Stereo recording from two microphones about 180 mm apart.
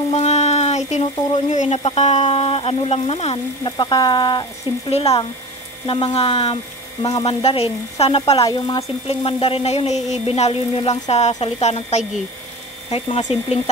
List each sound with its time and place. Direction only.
0.1 s frying: 40° left (ahead or behind)
1.8 s speech: 35° left (ahead or behind)
8.4 s speech: 20° left (ahead or behind)
9.0 s speech: 30° left (ahead or behind)